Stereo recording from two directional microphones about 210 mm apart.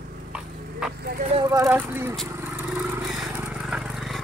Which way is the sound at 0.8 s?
5° right (ahead or behind).